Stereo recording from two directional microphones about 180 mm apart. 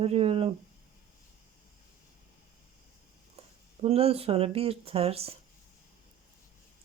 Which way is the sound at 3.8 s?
35° right (ahead or behind).